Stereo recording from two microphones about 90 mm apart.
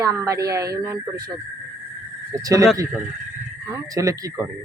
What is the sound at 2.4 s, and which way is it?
Speech, 40° right (ahead or behind).